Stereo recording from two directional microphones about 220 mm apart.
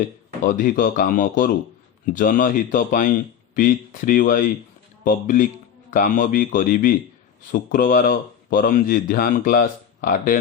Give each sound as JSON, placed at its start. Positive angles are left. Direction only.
{"t": 0.4, "sound": "speech", "side_deg": 35}